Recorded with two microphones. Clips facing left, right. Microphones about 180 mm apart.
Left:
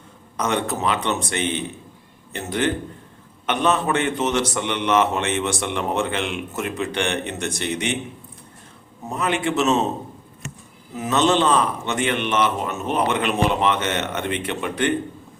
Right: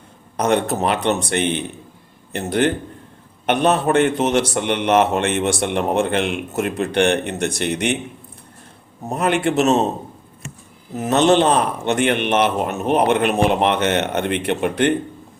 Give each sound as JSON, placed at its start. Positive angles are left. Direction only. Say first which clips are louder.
{"t": 0.3, "sound": "a man's voice", "louder": "right 5 dB", "side_deg": -60}
{"t": 9.0, "sound": "a man's voice", "louder": "right 4 dB", "side_deg": -55}
{"t": 11.1, "sound": "a man's voice", "louder": "right 4 dB", "side_deg": -60}